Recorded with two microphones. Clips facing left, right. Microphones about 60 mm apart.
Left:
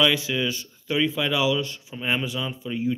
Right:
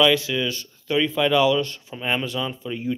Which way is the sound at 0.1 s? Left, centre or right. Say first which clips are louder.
Right 3 dB; centre.